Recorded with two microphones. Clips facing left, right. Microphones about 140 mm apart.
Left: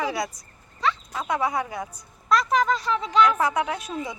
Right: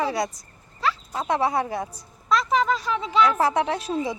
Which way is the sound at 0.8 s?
Centre (ahead or behind).